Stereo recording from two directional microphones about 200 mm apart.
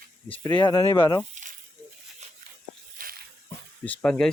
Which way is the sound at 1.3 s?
40° right (ahead or behind).